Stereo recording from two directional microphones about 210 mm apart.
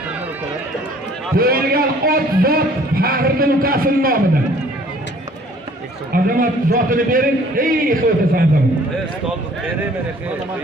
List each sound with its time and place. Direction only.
1.4 s a man's voice: 45° right (ahead or behind)
6.1 s a man's voice: 45° right (ahead or behind)